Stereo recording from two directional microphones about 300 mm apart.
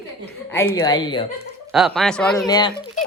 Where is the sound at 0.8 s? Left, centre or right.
Centre.